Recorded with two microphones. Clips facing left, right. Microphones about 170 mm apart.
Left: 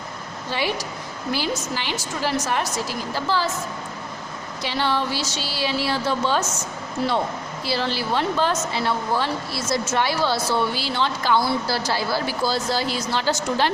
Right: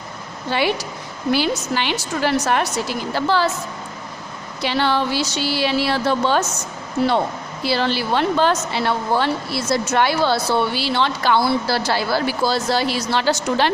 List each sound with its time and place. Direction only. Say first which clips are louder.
0.5 s a woman's voice: right 5 dB; 65° right (ahead or behind)
4.6 s a woman's voice: right 4 dB; 65° right (ahead or behind)